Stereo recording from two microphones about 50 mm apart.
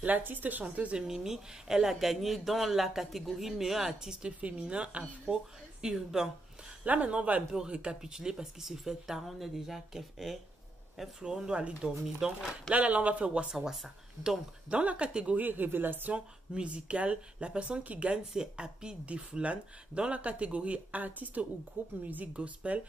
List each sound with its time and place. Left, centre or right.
0.0 s speech: right
0.9 s speech: centre
4.4 s speech: right
5.3 s speech: centre
6.8 s speech: right; by 10.3 s centre
11.2 s speech: centre
12.4 s speech: centre
12.7 s speech: right
13.6 s speech: centre
14.7 s speech: right
15.4 s speech: right
16.5 s speech: right
18.3 s speech: centre